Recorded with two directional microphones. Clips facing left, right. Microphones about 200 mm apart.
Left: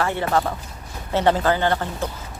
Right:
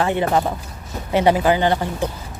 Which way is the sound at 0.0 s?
20° right (ahead or behind).